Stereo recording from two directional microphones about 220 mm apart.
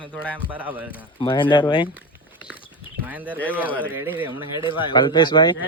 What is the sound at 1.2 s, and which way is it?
Speech, 20° left (ahead or behind).